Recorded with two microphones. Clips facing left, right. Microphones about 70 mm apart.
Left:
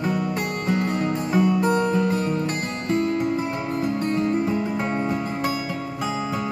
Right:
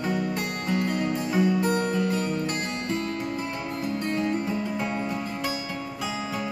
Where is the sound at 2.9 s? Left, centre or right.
Left.